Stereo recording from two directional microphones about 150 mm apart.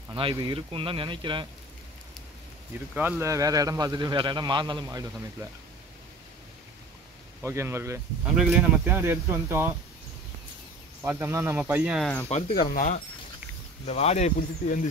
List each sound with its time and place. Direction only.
0.1 s speech: 35° right (ahead or behind)
2.9 s a man's voice: 15° right (ahead or behind)
7.4 s a man's voice: 20° right (ahead or behind)
8.3 s speech: 5° right (ahead or behind)
11.0 s speech: 15° right (ahead or behind)
12.5 s speech: 65° left (ahead or behind)
13.8 s speech: 45° left (ahead or behind)